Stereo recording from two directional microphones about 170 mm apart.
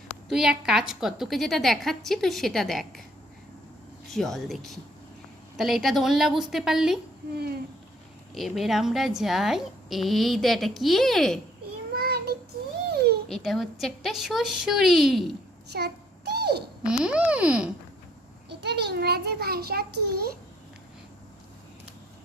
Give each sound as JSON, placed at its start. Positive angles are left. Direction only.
{"t": 0.3, "sound": "a woman's voice", "side_deg": 0}
{"t": 4.1, "sound": "a woman's voice", "side_deg": 0}
{"t": 8.4, "sound": "a woman's voice", "side_deg": 0}
{"t": 11.9, "sound": "child singing", "side_deg": -65}
{"t": 12.9, "sound": "a sound", "side_deg": -70}
{"t": 13.2, "sound": "a woman's voice", "side_deg": 0}
{"t": 15.7, "sound": "child singing", "side_deg": -75}
{"t": 16.8, "sound": "a woman's voice", "side_deg": -5}
{"t": 18.4, "sound": "a child's voice", "side_deg": -85}